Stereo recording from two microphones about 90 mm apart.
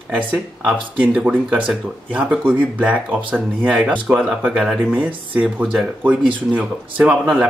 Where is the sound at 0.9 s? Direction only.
15° right (ahead or behind).